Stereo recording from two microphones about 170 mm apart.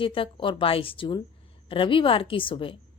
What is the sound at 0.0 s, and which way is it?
A woman's voice, 30° left (ahead or behind).